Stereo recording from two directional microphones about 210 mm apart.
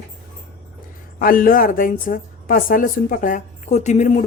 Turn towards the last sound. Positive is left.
turn(degrees=30)  # may be behind; listen again after turning